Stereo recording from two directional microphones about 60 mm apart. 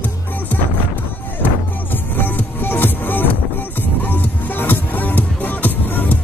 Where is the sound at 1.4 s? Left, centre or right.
Left.